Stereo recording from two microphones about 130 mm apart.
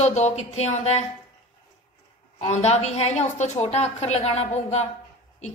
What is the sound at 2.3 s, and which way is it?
A woman's voice, 55° left (ahead or behind).